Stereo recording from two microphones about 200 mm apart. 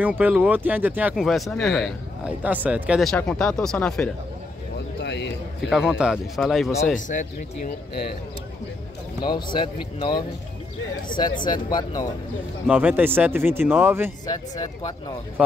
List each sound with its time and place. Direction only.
0.2 s speech: 10° right (ahead or behind)
5.0 s a sound: 60° left (ahead or behind)
5.6 s speech: centre (ahead or behind)
7.1 s speech: 40° left (ahead or behind)
9.2 s speech: 25° left (ahead or behind)
12.6 s speech: 5° right (ahead or behind)
14.2 s speech: 20° left (ahead or behind)